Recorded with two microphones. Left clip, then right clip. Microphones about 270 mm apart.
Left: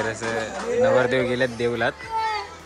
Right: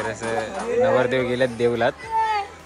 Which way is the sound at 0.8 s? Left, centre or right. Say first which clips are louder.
Even; centre.